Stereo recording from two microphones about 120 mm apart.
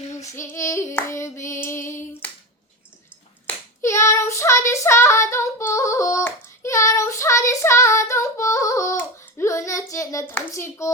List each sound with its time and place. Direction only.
0.2 s female singing: 25° left (ahead or behind)
3.8 s child singing: 25° left (ahead or behind)